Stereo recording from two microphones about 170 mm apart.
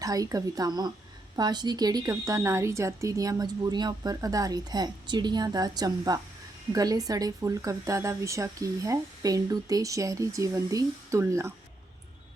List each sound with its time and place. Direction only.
0.0 s a woman's voice: 20° right (ahead or behind)